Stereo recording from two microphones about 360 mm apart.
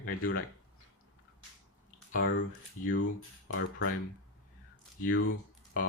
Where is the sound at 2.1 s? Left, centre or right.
Left.